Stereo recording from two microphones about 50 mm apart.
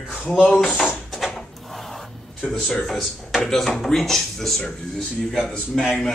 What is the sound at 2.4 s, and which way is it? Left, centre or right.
Speech, centre.